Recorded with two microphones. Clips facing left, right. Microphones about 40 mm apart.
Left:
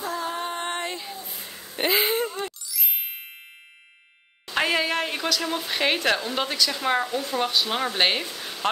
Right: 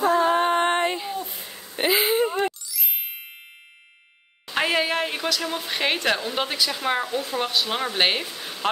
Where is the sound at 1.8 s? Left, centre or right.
Centre.